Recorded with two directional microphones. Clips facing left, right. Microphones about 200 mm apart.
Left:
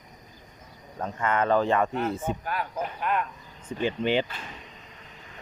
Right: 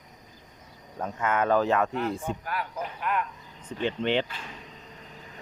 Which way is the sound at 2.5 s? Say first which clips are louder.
Left 2 dB; 25° left (ahead or behind).